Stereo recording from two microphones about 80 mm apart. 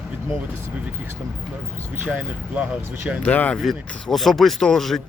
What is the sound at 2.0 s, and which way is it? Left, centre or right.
Speech, centre.